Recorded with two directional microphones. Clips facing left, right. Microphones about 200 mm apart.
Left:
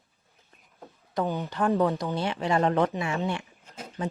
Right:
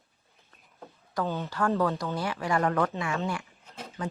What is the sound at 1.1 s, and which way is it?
A woman's voice, 15° left (ahead or behind).